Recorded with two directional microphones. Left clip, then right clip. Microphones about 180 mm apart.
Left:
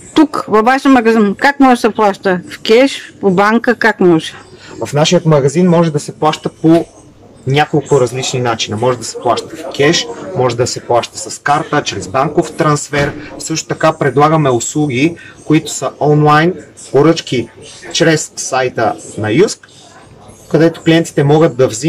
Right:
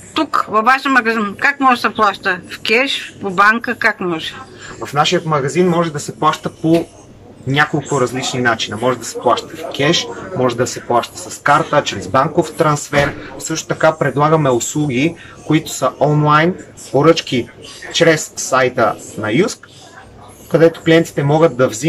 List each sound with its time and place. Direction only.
0.1 s speech: 35° left (ahead or behind)
4.8 s speech: 15° left (ahead or behind)
20.5 s speech: 5° left (ahead or behind)